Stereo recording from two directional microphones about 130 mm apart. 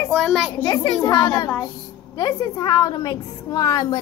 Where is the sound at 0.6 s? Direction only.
35° left (ahead or behind).